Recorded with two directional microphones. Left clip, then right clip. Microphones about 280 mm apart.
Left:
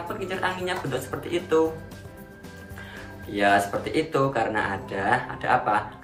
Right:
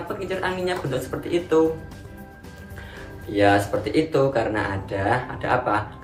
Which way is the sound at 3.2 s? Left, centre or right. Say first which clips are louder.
Right 2 dB; centre.